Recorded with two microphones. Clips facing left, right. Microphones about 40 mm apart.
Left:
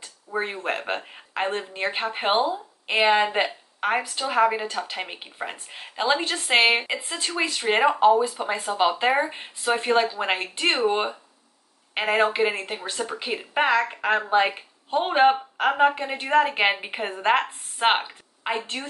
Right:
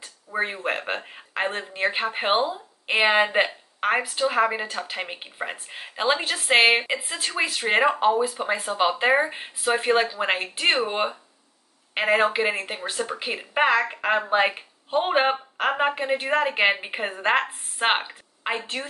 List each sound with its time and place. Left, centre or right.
0.0 s a woman's voice: centre